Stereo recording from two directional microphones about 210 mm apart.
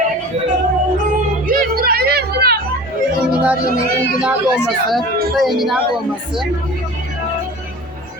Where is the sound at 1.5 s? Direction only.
45° right (ahead or behind).